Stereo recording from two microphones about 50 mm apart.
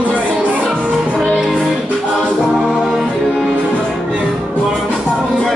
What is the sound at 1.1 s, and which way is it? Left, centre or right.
Music, right.